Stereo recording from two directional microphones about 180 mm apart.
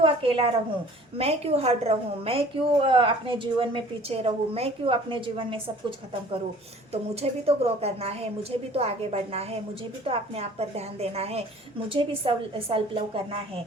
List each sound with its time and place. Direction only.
0.0 s a sound: 30° right (ahead or behind)
1.2 s a woman's voice: 35° right (ahead or behind)
6.9 s a woman's voice: 35° right (ahead or behind)